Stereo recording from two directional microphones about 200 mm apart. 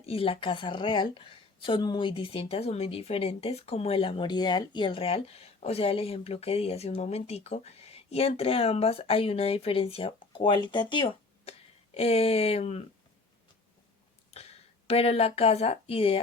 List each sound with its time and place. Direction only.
0.0 s speech: 30° left (ahead or behind)
14.3 s speech: 30° left (ahead or behind)